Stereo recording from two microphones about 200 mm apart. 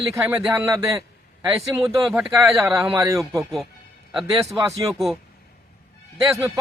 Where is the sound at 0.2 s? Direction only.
10° right (ahead or behind).